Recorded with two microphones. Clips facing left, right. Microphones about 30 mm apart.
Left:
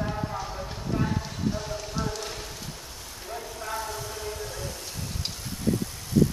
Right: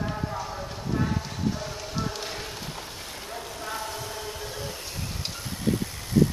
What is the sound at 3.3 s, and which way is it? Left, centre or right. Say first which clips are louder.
Vehicle: left 2 dB; centre.